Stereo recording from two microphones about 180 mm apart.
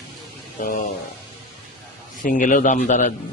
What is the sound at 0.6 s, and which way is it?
Speech, 45° left (ahead or behind).